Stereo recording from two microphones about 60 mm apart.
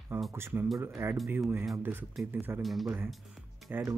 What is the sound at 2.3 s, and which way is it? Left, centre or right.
Speech, right.